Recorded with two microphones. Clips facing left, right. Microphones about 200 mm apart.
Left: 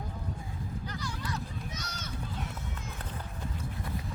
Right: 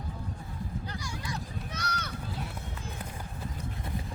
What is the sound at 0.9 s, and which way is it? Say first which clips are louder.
Music: left 1 dB; 10° right (ahead or behind).